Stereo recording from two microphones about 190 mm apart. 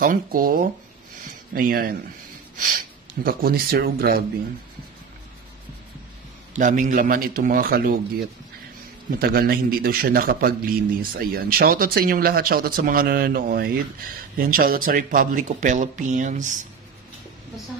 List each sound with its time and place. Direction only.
0.0 s a man's voice: 45° right (ahead or behind)
3.3 s a man's voice: 50° right (ahead or behind)
6.5 s a man's voice: 40° right (ahead or behind)
9.2 s a man's voice: 55° right (ahead or behind)